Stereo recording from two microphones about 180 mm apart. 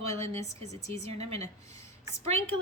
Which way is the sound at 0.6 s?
40° right (ahead or behind).